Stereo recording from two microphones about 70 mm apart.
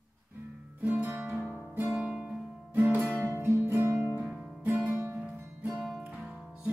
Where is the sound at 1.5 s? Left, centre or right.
Right.